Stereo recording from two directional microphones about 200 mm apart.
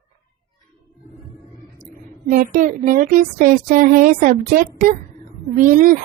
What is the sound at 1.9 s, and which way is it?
A woman's voice, 45° right (ahead or behind).